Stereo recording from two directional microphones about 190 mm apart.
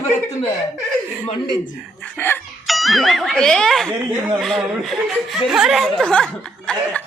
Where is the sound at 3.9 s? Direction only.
10° right (ahead or behind).